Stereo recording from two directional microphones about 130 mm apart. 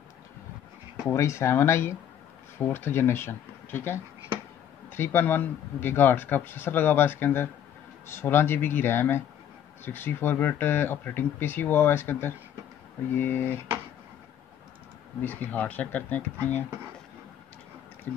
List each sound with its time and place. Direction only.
1.0 s speech: 20° left (ahead or behind)
15.2 s speech: 10° left (ahead or behind)
18.1 s speech: 15° left (ahead or behind)